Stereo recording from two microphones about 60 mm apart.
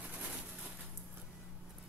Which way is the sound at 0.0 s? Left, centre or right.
Right.